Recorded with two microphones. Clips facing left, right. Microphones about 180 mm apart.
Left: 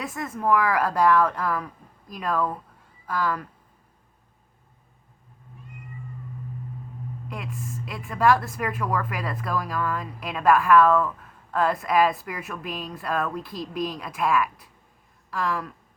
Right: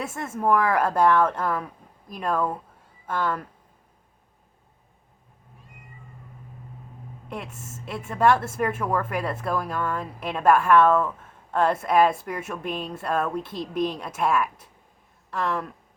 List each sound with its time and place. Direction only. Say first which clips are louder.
0.0 s speech: right 1 dB; 25° right (ahead or behind)
7.3 s speech: right 1 dB; 25° right (ahead or behind)